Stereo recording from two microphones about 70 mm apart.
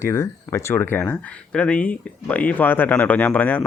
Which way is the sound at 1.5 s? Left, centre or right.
Centre.